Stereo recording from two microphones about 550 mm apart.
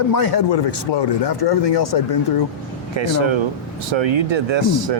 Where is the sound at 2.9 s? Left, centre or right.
Right.